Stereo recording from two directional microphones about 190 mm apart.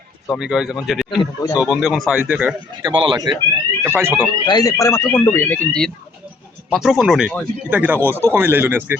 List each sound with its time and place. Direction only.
0.3 s speech: 5° right (ahead or behind)
1.2 s speech: 15° left (ahead or behind)
1.6 s speech: centre (ahead or behind)
2.9 s speech: 25° right (ahead or behind)
3.8 s speech: 10° right (ahead or behind)
4.4 s speech: 20° left (ahead or behind); by 9.0 s 10° right (ahead or behind)